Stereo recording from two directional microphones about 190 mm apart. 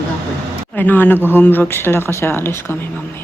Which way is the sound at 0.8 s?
10° left (ahead or behind).